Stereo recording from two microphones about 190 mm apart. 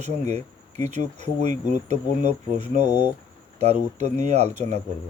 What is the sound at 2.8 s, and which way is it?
Speech, 25° left (ahead or behind).